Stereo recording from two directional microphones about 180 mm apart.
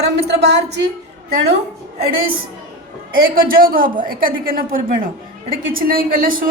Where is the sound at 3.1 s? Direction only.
50° right (ahead or behind).